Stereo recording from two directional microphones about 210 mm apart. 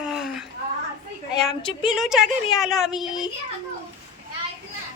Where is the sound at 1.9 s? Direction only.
Centre (ahead or behind).